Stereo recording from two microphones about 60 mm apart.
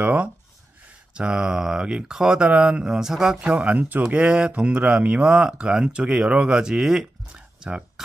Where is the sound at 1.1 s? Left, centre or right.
Centre.